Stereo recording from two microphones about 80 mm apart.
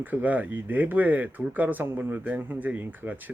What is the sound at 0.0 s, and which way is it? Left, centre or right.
Speech, right.